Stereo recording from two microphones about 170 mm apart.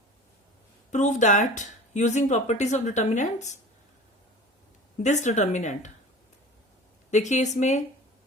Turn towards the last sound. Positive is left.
turn(degrees=45)  # may be behind; listen again after turning